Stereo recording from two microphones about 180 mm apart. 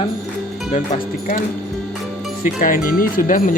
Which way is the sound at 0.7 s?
45° left (ahead or behind).